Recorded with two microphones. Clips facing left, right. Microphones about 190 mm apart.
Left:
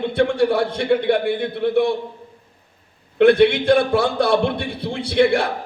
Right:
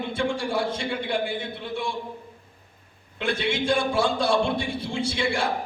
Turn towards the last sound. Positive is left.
turn(degrees=60)  # may be behind; listen again after turning